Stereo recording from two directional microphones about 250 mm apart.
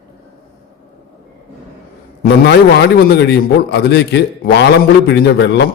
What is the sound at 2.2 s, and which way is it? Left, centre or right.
A man's voice, left.